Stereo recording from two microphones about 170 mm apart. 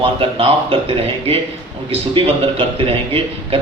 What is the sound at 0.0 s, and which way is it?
A man's voice, 30° right (ahead or behind).